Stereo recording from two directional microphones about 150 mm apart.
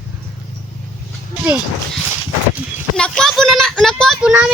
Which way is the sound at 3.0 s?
Centre (ahead or behind).